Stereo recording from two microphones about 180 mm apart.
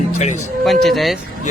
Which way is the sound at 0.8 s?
Centre (ahead or behind).